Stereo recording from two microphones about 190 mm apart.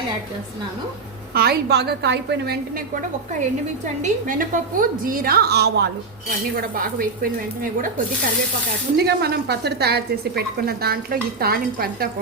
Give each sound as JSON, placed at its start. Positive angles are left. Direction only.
{"t": 1.3, "sound": "a woman's voice", "side_deg": -55}
{"t": 4.0, "sound": "a woman's voice", "side_deg": -45}
{"t": 6.6, "sound": "a woman's voice", "side_deg": -50}
{"t": 9.0, "sound": "a woman's voice", "side_deg": -55}